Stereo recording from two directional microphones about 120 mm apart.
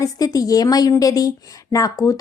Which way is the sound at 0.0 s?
30° left (ahead or behind).